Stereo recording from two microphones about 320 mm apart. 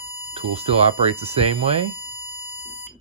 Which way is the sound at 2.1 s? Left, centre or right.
Centre.